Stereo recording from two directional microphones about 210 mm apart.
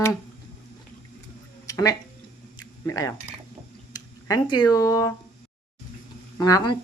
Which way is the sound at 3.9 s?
15° left (ahead or behind).